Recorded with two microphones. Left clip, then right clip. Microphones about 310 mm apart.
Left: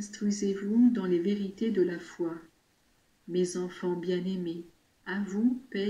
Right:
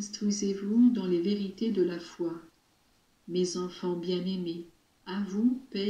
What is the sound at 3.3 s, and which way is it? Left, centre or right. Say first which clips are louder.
Speech: even; left.